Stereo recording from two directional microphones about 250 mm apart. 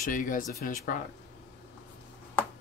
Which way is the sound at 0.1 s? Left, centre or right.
Left.